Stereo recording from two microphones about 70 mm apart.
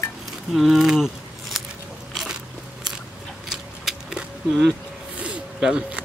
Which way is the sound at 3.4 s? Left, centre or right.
Centre.